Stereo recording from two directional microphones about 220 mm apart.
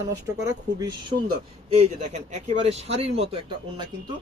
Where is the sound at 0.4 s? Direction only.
15° right (ahead or behind).